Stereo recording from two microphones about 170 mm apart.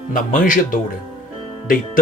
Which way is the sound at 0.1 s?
50° left (ahead or behind).